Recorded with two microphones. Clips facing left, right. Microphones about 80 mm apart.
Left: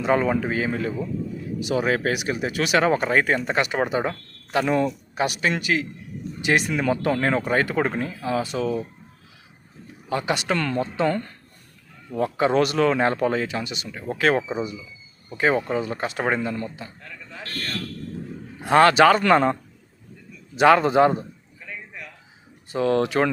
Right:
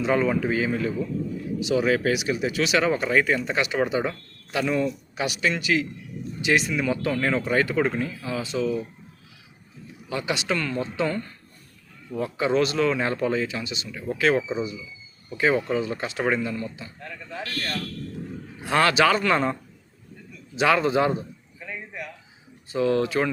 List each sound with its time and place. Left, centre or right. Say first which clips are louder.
0.0 s speech: left 1 dB; left
10.1 s speech: left 3 dB; left
18.6 s speech: left 5 dB; left
20.6 s speech: left 5 dB; left
21.6 s a sound: right 3 dB; centre
22.7 s speech: left 1 dB; left